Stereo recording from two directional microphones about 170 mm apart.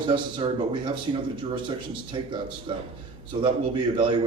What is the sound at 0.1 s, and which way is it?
A man's voice, 30° right (ahead or behind).